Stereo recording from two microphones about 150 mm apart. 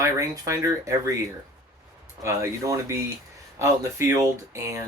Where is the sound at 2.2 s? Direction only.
20° right (ahead or behind).